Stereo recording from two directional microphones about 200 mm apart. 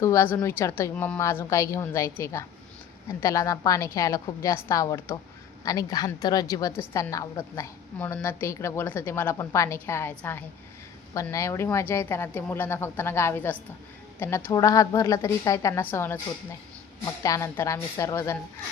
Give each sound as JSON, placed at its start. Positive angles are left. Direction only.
{"t": 0.0, "sound": "a woman's voice", "side_deg": 15}
{"t": 17.2, "sound": "a woman's voice", "side_deg": 15}